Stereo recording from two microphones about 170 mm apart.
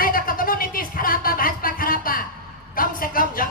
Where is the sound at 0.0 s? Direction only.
55° left (ahead or behind).